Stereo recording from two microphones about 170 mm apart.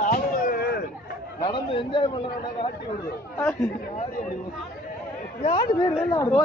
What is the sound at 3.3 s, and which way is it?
Speech, 10° left (ahead or behind).